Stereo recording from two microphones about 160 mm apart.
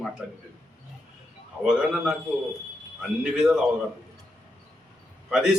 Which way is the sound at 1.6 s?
5° right (ahead or behind).